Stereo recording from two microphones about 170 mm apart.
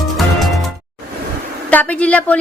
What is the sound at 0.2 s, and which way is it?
Music, centre (ahead or behind).